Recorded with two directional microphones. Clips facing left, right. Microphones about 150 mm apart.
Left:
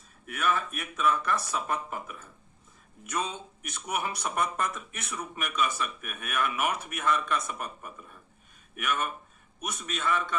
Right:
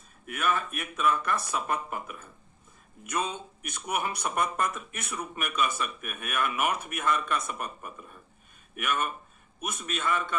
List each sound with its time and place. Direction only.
0.3 s a man's voice: 50° right (ahead or behind)